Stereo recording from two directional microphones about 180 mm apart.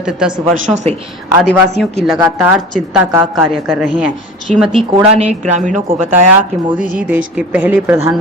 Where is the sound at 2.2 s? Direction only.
10° right (ahead or behind).